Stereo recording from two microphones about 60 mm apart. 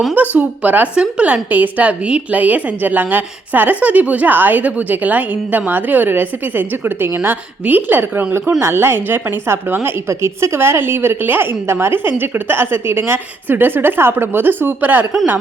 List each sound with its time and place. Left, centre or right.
0.1 s a woman's voice: right
10.1 s a woman's voice: right